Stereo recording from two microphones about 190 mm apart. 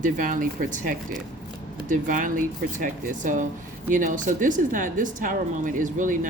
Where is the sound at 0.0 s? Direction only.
45° right (ahead or behind).